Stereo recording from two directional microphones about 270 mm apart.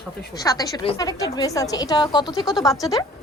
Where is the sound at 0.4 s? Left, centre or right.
Centre.